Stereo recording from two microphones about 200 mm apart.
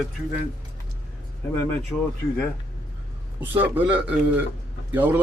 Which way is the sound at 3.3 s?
10° right (ahead or behind).